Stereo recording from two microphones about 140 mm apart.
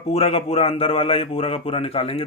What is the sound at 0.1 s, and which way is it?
Speech, 45° left (ahead or behind).